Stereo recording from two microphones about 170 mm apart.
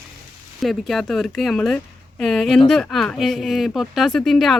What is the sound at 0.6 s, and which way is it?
Speech, centre (ahead or behind).